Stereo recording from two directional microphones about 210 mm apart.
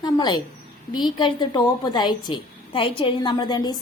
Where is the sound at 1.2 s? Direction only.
20° left (ahead or behind).